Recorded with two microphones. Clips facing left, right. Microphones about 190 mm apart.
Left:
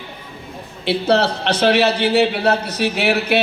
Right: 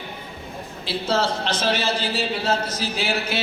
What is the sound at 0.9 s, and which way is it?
A man's voice, 65° left (ahead or behind).